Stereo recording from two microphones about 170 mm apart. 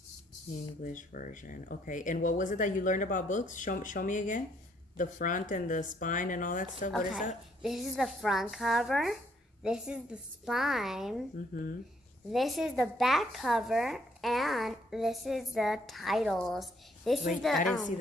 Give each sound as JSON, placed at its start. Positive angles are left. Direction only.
{"t": 0.8, "sound": "speech", "side_deg": 50}
{"t": 7.6, "sound": "a woman's voice", "side_deg": 0}
{"t": 11.3, "sound": "speech", "side_deg": 55}
{"t": 12.3, "sound": "a woman's voice", "side_deg": 0}